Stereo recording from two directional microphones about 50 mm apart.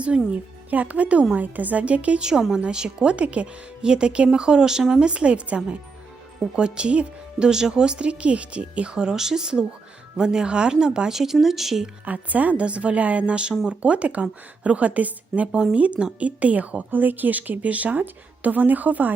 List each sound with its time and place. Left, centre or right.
0.3 s a woman's voice: right; by 11.9 s centre
12.0 s a woman's voice: right